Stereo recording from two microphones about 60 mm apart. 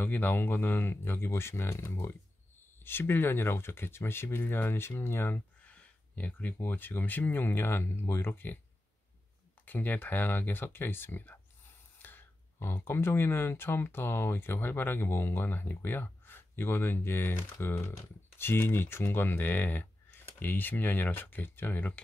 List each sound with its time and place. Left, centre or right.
0.0 s speech: left
5.6 s speech: left
9.7 s speech: left